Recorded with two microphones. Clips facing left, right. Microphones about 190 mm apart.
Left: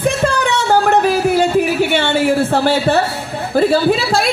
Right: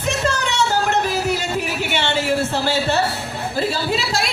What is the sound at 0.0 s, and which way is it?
Music, 55° left (ahead or behind).